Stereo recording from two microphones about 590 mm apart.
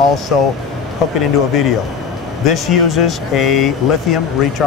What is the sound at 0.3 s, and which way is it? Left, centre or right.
Speech, left.